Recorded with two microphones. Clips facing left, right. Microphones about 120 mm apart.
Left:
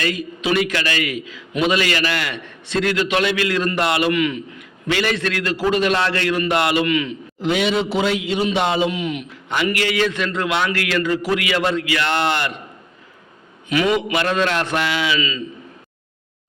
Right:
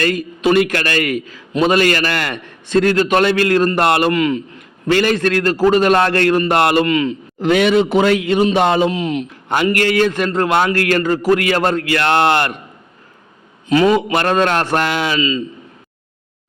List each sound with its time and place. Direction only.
0.0 s a man's voice: 50° right (ahead or behind)
4.1 s a man's voice: 35° right (ahead or behind); by 6.8 s 50° right (ahead or behind)
6.8 s a man's voice: 35° right (ahead or behind)
7.3 s a man's voice: 55° right (ahead or behind)
13.7 s a man's voice: 35° right (ahead or behind)
15.2 s a man's voice: 35° right (ahead or behind)